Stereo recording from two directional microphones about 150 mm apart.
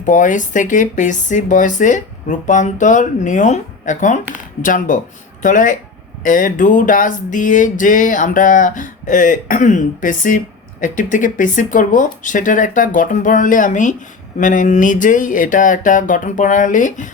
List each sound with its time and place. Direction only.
0.0 s music: 60° left (ahead or behind)
5.4 s speech: 60° left (ahead or behind)
6.2 s music: 60° left (ahead or behind)